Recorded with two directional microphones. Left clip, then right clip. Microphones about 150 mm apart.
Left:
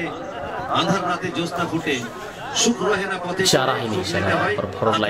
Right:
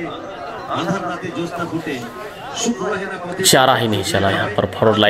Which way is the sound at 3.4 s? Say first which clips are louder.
Right 7 dB; 45° right (ahead or behind).